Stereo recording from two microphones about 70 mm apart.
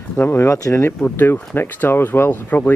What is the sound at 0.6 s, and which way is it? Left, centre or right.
Speech, left.